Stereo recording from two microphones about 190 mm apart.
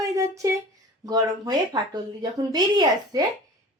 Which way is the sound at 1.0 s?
20° right (ahead or behind).